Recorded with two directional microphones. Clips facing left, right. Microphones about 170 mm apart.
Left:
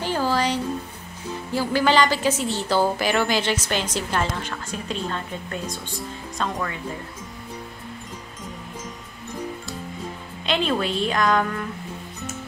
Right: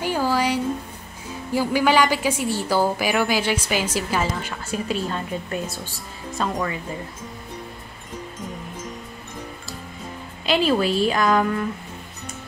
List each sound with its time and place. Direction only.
0.0 s a sound: 10° right (ahead or behind)
1.5 s a woman's voice: 15° right (ahead or behind)
10.4 s a woman's voice: 5° right (ahead or behind)